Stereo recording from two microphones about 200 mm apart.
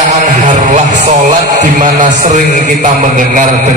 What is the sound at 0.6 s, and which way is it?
A man's voice, 35° right (ahead or behind).